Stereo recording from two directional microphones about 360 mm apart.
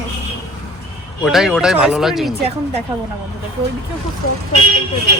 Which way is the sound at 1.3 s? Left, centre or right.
Centre.